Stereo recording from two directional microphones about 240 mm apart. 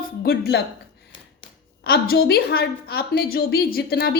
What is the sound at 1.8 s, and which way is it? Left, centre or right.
A woman's voice, left.